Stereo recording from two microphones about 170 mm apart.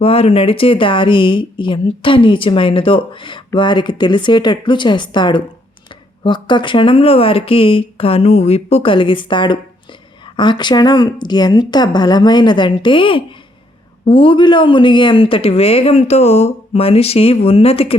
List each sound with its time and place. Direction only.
0.0 s speech: 35° left (ahead or behind)